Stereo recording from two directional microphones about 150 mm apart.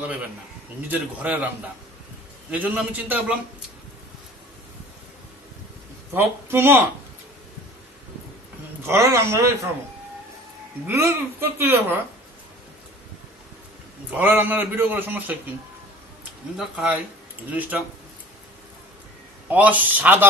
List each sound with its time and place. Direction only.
0.8 s a man's voice: 10° right (ahead or behind)
2.5 s a man's voice: 10° right (ahead or behind)
6.1 s a man's voice: 15° right (ahead or behind)
8.8 s a man's voice: 20° right (ahead or behind)
10.9 s a man's voice: 15° right (ahead or behind)
14.1 s a man's voice: 15° right (ahead or behind)
16.5 s a man's voice: 5° right (ahead or behind)
19.5 s a man's voice: 10° right (ahead or behind)